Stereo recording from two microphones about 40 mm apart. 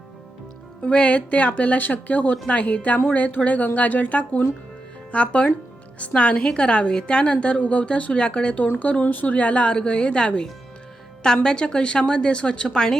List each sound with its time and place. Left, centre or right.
0.8 s a woman's voice: left
8.6 s speech: left
9.2 s a woman's voice: left
11.4 s a woman's voice: left